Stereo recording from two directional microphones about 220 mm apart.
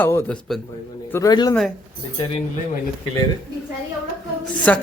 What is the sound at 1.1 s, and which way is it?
Speech, 15° left (ahead or behind).